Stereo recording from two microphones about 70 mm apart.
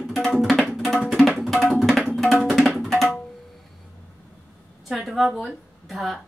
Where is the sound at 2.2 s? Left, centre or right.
Centre.